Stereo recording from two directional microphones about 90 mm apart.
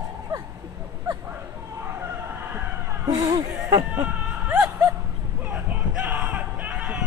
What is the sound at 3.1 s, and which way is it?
Speech, 40° right (ahead or behind).